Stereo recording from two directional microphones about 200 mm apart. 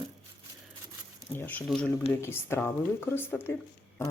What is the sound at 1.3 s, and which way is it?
Speech, 10° left (ahead or behind).